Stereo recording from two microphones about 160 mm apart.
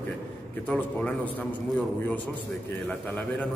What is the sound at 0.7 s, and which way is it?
Speech, 10° left (ahead or behind).